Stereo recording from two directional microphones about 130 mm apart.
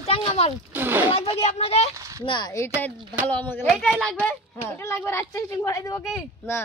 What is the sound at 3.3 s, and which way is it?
Speech, 15° left (ahead or behind).